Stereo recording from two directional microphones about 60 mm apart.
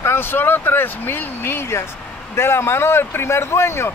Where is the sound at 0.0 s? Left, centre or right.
Left.